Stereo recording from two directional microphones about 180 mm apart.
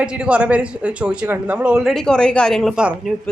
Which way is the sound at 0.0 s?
5° right (ahead or behind).